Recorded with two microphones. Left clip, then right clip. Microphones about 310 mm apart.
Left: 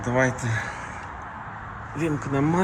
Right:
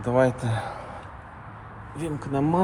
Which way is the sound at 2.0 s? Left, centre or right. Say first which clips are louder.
Left 2 dB; centre.